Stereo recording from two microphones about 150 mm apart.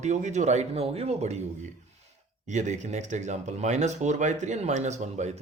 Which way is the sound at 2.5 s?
55° right (ahead or behind).